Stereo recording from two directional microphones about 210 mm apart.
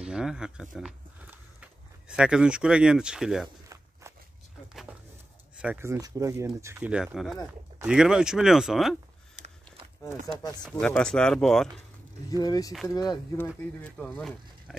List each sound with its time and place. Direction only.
0.0 s speech: 5° right (ahead or behind)
3.6 s walk: 15° right (ahead or behind)
5.6 s speech: 10° right (ahead or behind)
10.6 s speech: 5° left (ahead or behind)
12.3 s speech: 15° left (ahead or behind)
13.6 s speech: 5° left (ahead or behind)